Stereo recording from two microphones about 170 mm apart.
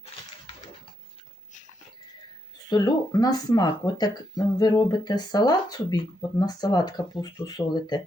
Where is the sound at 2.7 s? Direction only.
25° left (ahead or behind).